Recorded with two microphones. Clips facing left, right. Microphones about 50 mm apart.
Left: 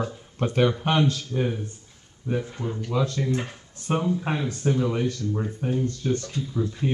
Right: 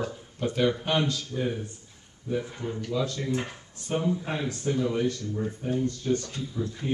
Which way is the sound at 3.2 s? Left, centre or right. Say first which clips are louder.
Left 2 dB; centre.